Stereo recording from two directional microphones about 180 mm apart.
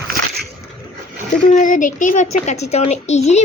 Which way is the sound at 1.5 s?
45° left (ahead or behind).